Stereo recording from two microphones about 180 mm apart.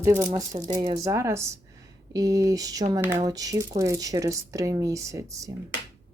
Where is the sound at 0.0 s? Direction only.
15° right (ahead or behind).